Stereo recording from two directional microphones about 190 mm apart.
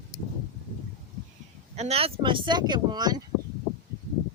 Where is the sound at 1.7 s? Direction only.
35° right (ahead or behind).